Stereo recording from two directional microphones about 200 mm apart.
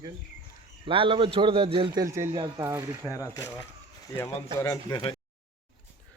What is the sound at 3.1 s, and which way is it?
Speech, 15° left (ahead or behind).